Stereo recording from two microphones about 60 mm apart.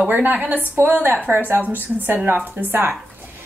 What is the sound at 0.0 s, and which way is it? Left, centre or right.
A woman's voice, right.